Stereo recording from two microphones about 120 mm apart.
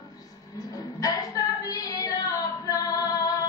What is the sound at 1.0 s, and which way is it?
Female singing, 30° left (ahead or behind).